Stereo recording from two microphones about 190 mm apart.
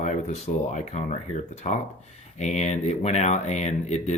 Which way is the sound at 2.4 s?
35° left (ahead or behind).